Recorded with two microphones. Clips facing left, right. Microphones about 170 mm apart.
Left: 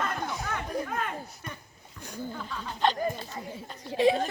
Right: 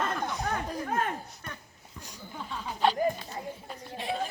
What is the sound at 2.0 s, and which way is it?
Speech, 55° left (ahead or behind).